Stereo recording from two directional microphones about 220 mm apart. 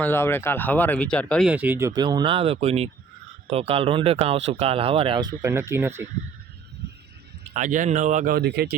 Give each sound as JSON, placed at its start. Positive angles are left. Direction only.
{"t": 0.0, "sound": "speech", "side_deg": 10}
{"t": 7.5, "sound": "speech", "side_deg": -35}